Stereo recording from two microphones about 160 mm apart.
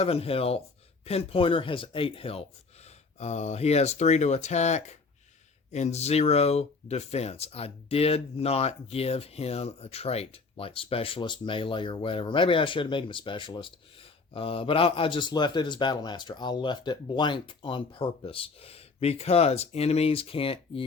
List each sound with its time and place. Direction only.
0.0 s speech: 35° left (ahead or behind)